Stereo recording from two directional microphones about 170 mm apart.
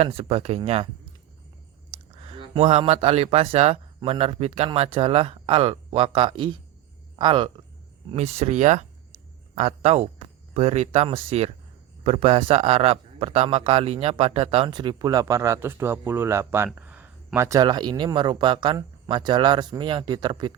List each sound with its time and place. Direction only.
0.0 s a man's voice: 35° right (ahead or behind)
1.9 s speech: 35° right (ahead or behind)
8.1 s a man's voice: 40° right (ahead or behind)